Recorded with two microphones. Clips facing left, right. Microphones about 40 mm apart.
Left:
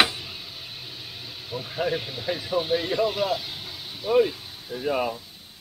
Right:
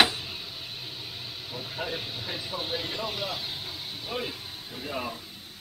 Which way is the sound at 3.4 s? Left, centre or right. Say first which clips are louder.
Even; centre.